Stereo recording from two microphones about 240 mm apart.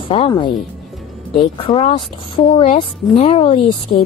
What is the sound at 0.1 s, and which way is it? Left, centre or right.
Speech, left.